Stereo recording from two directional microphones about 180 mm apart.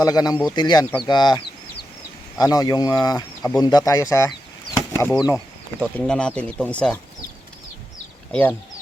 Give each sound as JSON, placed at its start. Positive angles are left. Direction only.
{"t": 0.0, "sound": "speech", "side_deg": 20}
{"t": 5.8, "sound": "speech", "side_deg": 5}
{"t": 8.3, "sound": "speech", "side_deg": 10}